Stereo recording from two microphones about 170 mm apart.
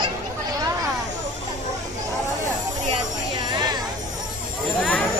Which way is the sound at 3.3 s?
25° right (ahead or behind).